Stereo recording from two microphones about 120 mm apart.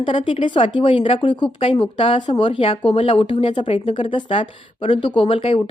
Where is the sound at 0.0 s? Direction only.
45° left (ahead or behind).